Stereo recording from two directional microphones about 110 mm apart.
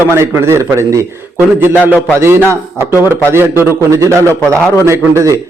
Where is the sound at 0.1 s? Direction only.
25° right (ahead or behind).